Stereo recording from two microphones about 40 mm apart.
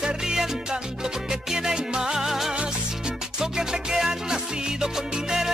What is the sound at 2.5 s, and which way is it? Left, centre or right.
Music, right.